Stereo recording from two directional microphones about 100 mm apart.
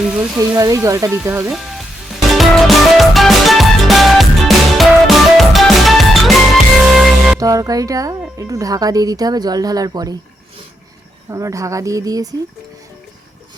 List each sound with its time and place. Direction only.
0.0 s a sound: 10° right (ahead or behind)
0.6 s speech: 35° right (ahead or behind)
1.5 s frying: centre (ahead or behind)
2.3 s music: centre (ahead or behind)
7.3 s speech: 35° right (ahead or behind)
11.3 s speech: 30° right (ahead or behind)